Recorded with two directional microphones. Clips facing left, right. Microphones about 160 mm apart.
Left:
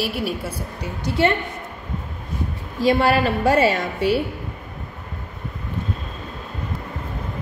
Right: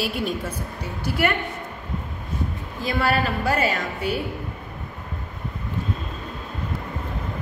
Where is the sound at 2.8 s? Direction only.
35° left (ahead or behind).